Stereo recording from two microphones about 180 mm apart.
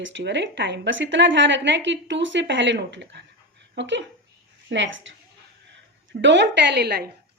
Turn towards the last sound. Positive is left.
turn(degrees=-65)  # may be behind; listen again after turning